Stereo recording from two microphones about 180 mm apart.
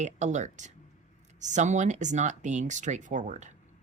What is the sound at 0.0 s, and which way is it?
Speech, 40° right (ahead or behind).